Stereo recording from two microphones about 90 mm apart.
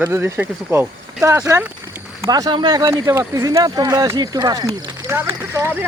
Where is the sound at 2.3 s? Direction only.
50° right (ahead or behind).